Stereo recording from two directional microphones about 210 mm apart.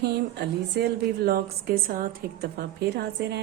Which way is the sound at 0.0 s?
50° right (ahead or behind).